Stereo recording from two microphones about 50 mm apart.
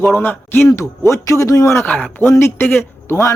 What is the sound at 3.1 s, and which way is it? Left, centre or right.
Speech, left.